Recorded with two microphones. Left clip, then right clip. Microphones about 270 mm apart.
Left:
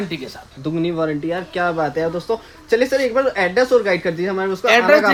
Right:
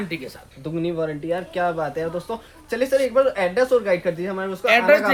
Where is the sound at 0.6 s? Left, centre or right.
Left.